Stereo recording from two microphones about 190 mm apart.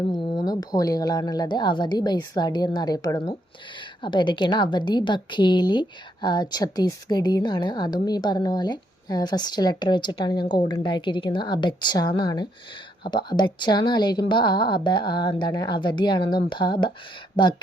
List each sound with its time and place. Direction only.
0.1 s a woman's voice: 20° left (ahead or behind)